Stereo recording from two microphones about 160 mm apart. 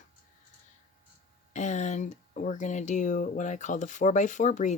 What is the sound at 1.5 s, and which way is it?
Speech, 50° left (ahead or behind).